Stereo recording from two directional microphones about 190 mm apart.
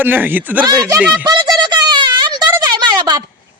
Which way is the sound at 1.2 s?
20° right (ahead or behind).